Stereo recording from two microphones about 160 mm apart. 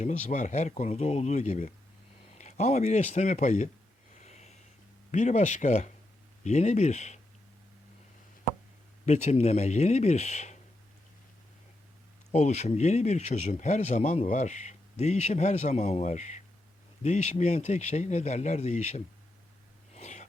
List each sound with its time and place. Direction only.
0.0 s speech: 50° left (ahead or behind)
4.2 s a sound: 45° left (ahead or behind)
5.1 s speech: 45° left (ahead or behind)
9.0 s speech: 45° left (ahead or behind)
12.3 s speech: 45° left (ahead or behind)
19.9 s gasp: 45° left (ahead or behind)